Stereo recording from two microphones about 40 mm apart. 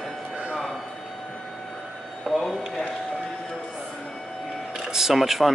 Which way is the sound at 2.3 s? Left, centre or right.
Centre.